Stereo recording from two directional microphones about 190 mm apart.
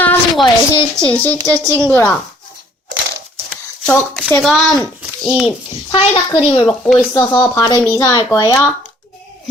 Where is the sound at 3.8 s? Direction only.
Centre (ahead or behind).